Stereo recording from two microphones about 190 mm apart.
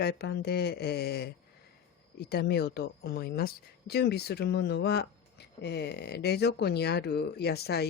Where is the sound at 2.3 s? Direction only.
60° left (ahead or behind).